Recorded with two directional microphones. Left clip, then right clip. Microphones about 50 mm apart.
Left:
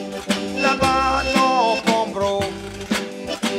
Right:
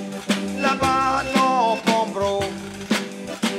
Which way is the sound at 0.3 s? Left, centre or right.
Right.